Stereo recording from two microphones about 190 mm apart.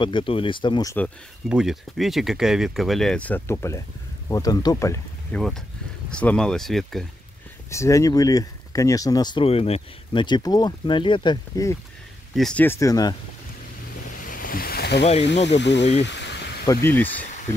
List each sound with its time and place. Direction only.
0.0 s speech: 25° left (ahead or behind)
1.5 s speech: 5° right (ahead or behind); by 5.4 s 15° left (ahead or behind)
6.0 s speech: 5° left (ahead or behind)
7.7 s speech: 15° left (ahead or behind)
12.4 s speech: 5° left (ahead or behind)
14.2 s boat: 45° left (ahead or behind)
15.2 s speech: 65° left (ahead or behind)
16.0 s a sound: 65° left (ahead or behind)
16.6 s speech: 10° left (ahead or behind)